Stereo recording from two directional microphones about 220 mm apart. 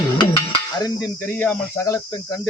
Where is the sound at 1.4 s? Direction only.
10° left (ahead or behind).